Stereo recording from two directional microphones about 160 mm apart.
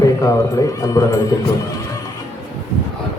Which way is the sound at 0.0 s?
20° left (ahead or behind).